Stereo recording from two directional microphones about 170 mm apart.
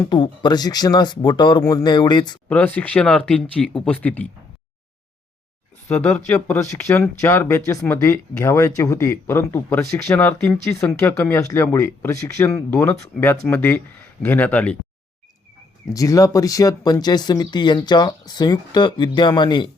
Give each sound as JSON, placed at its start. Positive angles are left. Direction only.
{"t": 0.0, "sound": "speech", "side_deg": 25}
{"t": 2.5, "sound": "speech", "side_deg": 10}
{"t": 5.9, "sound": "speech", "side_deg": 10}
{"t": 15.9, "sound": "speech", "side_deg": 20}